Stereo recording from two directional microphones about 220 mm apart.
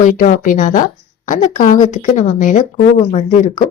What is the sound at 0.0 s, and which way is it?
A woman's voice, 35° left (ahead or behind).